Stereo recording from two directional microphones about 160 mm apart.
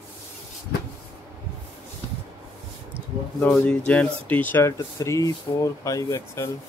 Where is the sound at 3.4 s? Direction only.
10° left (ahead or behind).